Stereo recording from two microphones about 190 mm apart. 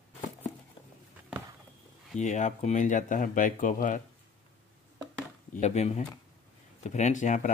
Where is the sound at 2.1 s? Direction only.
40° left (ahead or behind).